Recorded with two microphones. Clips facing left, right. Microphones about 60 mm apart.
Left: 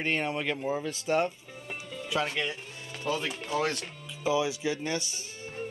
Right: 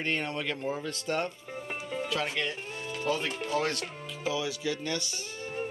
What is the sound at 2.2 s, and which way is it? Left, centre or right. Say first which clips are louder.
Speech: even; centre.